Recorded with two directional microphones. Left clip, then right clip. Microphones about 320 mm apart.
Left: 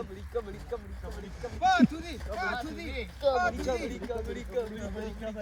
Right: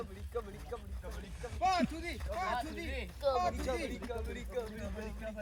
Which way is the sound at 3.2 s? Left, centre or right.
Left.